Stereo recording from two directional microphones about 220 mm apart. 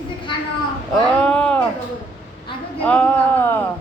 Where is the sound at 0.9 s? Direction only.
5° left (ahead or behind).